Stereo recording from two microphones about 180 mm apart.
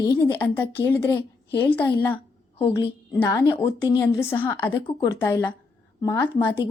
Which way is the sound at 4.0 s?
15° left (ahead or behind).